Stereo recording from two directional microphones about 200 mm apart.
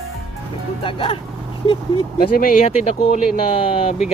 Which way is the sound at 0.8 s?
25° left (ahead or behind).